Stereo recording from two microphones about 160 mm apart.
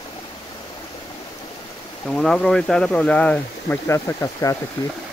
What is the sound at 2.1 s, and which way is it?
Speech, 5° left (ahead or behind).